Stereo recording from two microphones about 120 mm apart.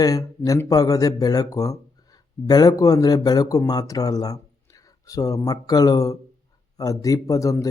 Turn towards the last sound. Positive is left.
turn(degrees=30)  # may be behind; listen again after turning